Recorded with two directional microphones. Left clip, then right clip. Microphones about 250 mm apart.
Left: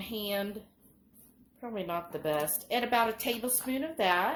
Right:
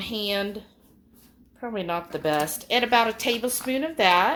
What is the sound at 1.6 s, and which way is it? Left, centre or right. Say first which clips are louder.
A woman's voice: right 7 dB; right.